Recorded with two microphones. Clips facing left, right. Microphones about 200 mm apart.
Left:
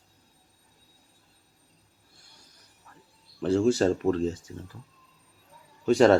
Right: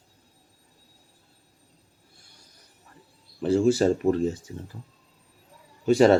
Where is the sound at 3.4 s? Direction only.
5° right (ahead or behind).